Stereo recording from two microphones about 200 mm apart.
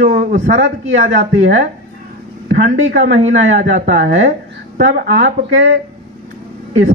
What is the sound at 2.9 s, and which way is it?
A man's voice, 35° right (ahead or behind).